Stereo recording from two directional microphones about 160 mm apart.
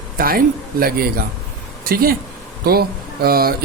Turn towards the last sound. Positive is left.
turn(degrees=-70)  # may be behind; listen again after turning